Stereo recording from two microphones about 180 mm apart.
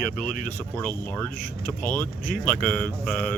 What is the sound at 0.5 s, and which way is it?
Speech, 10° left (ahead or behind).